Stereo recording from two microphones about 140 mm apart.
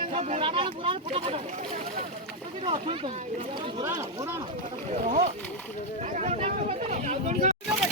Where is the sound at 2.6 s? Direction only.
40° right (ahead or behind).